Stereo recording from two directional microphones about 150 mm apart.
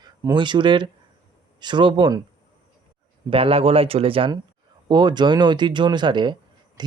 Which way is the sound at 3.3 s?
40° right (ahead or behind).